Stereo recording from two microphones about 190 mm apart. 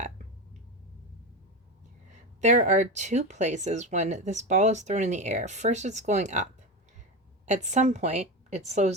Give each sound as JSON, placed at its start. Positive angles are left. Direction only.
{"t": 2.0, "sound": "speech", "side_deg": -40}